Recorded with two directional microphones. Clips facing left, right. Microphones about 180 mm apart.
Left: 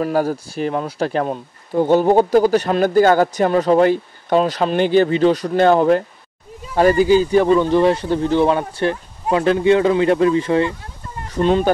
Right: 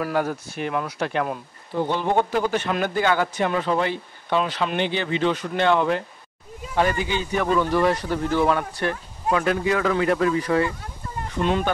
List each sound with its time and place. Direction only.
0.0 s a man's voice: 35° left (ahead or behind)
1.8 s a man's voice: 45° left (ahead or behind)
7.5 s speech: 25° left (ahead or behind)
11.2 s speech: 35° left (ahead or behind)